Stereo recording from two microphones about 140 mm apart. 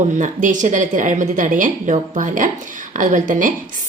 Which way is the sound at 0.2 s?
65° right (ahead or behind).